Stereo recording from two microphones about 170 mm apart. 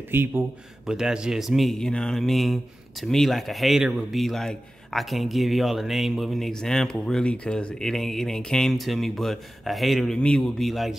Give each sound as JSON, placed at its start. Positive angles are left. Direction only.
{"t": 0.1, "sound": "speech", "side_deg": -15}